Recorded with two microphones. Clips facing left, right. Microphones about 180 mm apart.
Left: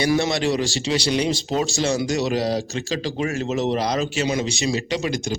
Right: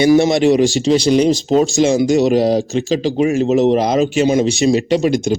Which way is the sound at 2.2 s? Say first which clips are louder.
Right 9 dB; 20° right (ahead or behind).